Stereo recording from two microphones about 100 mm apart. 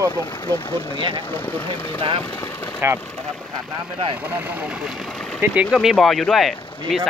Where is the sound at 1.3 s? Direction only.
20° left (ahead or behind).